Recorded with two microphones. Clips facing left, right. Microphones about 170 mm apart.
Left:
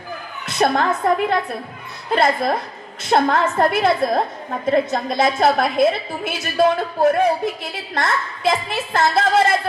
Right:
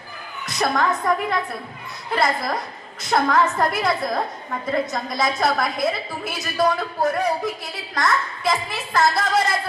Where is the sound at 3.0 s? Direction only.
25° left (ahead or behind).